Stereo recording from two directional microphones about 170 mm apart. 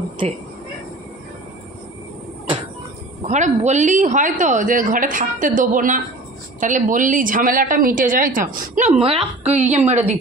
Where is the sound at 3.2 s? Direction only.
45° right (ahead or behind).